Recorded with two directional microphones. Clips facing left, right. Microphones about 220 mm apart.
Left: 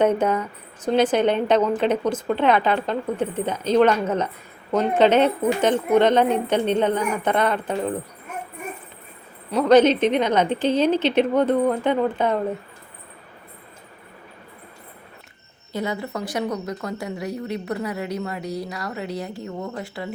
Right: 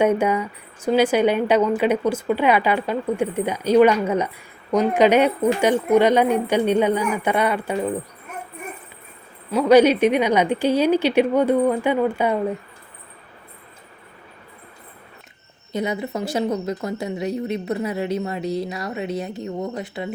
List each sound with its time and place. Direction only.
0.0 s a woman's voice: 10° right (ahead or behind)
9.5 s a woman's voice: 5° right (ahead or behind)
15.7 s speech: 20° right (ahead or behind)